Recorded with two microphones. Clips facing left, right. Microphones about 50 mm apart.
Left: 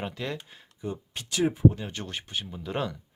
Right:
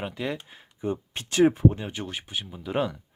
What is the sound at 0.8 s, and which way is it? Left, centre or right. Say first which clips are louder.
Speech: right 5 dB; right.